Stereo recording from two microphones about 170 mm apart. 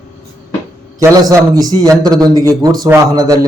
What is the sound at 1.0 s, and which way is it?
A man's voice, 20° right (ahead or behind).